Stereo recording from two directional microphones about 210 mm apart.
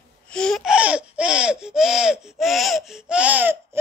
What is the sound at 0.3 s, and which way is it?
Laughter, centre (ahead or behind).